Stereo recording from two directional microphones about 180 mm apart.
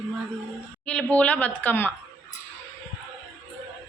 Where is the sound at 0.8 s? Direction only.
5° left (ahead or behind).